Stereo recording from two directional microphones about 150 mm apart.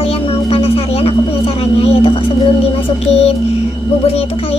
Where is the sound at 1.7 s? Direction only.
40° left (ahead or behind).